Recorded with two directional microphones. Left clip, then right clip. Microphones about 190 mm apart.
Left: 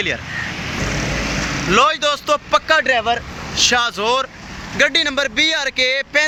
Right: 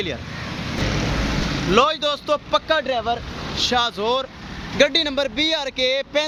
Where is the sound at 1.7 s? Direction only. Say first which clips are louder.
Left 3 dB; centre (ahead or behind).